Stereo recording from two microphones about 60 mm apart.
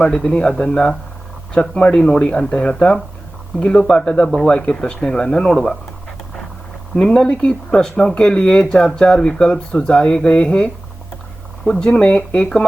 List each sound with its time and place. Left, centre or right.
0.0 s speech: centre
6.9 s speech: centre